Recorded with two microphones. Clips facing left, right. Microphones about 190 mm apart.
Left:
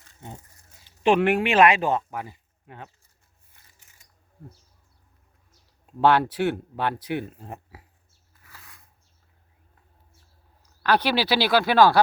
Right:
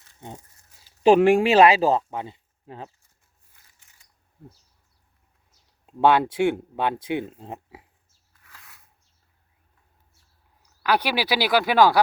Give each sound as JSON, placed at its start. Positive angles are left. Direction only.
{"t": 1.0, "sound": "speech", "side_deg": -35}
{"t": 5.8, "sound": "speech", "side_deg": -15}
{"t": 8.4, "sound": "a sound", "side_deg": 0}
{"t": 10.8, "sound": "speech", "side_deg": -10}